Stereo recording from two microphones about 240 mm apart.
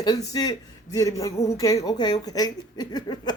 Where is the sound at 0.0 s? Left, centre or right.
Centre.